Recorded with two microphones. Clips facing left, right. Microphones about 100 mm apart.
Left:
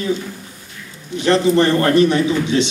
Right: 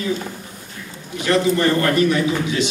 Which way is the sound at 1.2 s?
30° left (ahead or behind).